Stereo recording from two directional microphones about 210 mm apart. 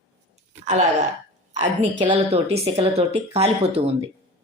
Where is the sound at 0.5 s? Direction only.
35° right (ahead or behind).